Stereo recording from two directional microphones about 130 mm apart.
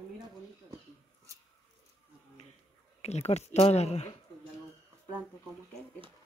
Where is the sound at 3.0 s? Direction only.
55° left (ahead or behind).